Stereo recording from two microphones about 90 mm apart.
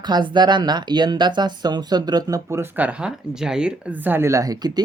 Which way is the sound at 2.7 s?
15° right (ahead or behind).